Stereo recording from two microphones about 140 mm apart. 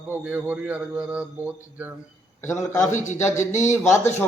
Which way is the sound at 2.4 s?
20° left (ahead or behind).